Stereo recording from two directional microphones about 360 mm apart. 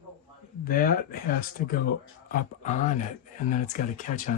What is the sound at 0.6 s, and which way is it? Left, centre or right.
Speech, left.